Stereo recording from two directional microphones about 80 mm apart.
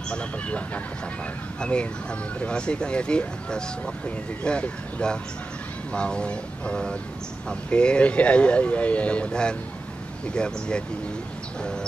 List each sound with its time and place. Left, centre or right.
0.1 s speech: centre